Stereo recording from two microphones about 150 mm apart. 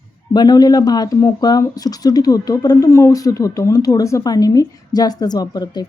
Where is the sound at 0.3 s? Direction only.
25° left (ahead or behind).